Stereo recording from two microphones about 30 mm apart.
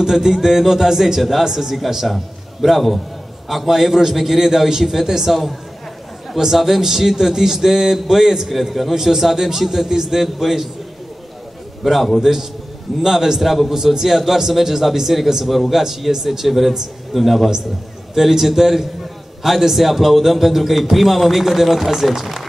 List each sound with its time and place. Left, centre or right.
0.0 s a man's voice: centre
6.3 s a man's voice: centre
8.5 s speech: centre
8.9 s a man's voice: centre
11.8 s speech: centre
12.2 s a man's voice: centre
15.8 s a man's voice: centre
18.1 s a man's voice: centre